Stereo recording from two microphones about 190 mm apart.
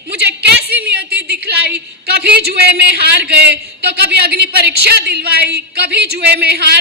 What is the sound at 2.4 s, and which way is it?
A woman's voice, 60° right (ahead or behind).